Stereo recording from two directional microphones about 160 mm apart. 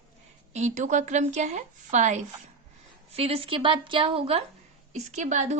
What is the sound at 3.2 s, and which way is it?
A woman's voice, 35° right (ahead or behind).